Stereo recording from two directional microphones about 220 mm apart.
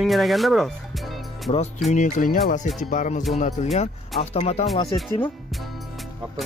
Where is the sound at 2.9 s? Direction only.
35° left (ahead or behind).